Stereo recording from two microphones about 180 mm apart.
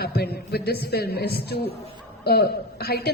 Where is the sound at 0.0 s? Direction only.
60° left (ahead or behind).